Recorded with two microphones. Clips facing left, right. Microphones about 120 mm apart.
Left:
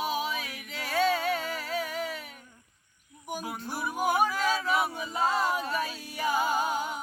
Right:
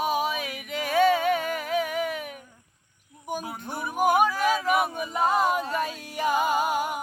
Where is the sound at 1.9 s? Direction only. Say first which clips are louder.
Right 6 dB; 60° right (ahead or behind).